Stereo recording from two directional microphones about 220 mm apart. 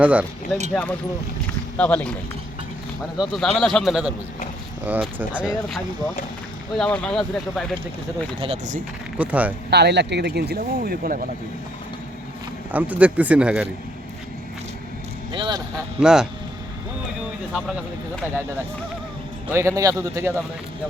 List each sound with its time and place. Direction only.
0.0 s speech: 5° right (ahead or behind)
0.7 s speech: 5° left (ahead or behind)
3.2 s speech: centre (ahead or behind)
8.4 s speech: 30° right (ahead or behind)
9.1 s speech: 5° right (ahead or behind)
9.6 s speech: 50° right (ahead or behind)
12.7 s speech: 5° right (ahead or behind)
15.3 s speech: 20° right (ahead or behind)
16.0 s speech: 5° right (ahead or behind)
19.5 s speech: 15° right (ahead or behind)